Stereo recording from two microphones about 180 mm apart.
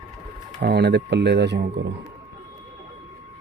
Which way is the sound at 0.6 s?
70° right (ahead or behind).